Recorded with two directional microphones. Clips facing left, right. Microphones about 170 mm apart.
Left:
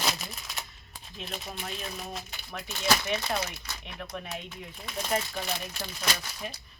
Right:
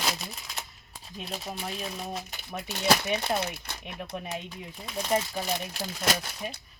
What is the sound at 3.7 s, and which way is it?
Speech, 20° right (ahead or behind).